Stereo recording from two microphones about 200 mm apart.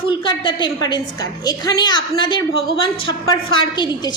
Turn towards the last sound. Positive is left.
turn(degrees=20)  # may be behind; listen again after turning